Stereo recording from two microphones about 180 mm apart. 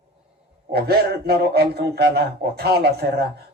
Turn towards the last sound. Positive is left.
turn(degrees=-60)  # may be behind; listen again after turning